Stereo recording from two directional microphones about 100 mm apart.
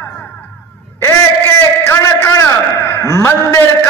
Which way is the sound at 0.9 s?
25° left (ahead or behind).